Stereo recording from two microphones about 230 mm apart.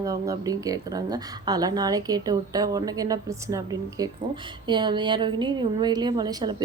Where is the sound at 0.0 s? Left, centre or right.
Centre.